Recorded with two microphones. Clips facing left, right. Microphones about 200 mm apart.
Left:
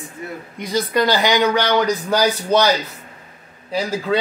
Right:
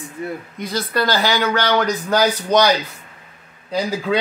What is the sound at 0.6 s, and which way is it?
Speech, 15° left (ahead or behind).